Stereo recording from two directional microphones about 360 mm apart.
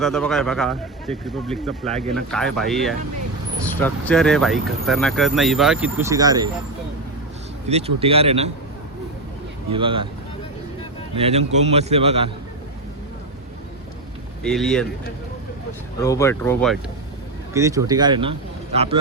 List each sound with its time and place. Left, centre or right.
0.0 s speech: centre
7.7 s a man's voice: centre
9.7 s a man's voice: centre
11.1 s a man's voice: centre
14.4 s speech: centre
16.0 s speech: centre
17.5 s speech: centre